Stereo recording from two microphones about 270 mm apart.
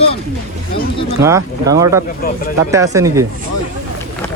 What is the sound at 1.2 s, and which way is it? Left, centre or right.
Speech, centre.